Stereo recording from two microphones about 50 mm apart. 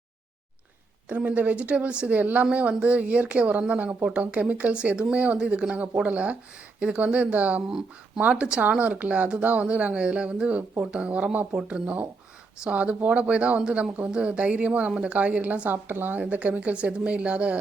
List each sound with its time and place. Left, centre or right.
1.0 s speech: right
7.7 s speech: centre; by 15.7 s right
15.7 s speech: right
16.2 s speech: right